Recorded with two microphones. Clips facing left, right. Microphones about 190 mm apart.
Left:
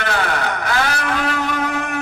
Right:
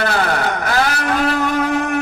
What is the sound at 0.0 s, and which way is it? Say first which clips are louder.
Vehicle: right 3 dB; 40° right (ahead or behind).